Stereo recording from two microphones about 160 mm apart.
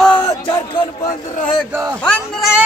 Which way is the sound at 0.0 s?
10° left (ahead or behind).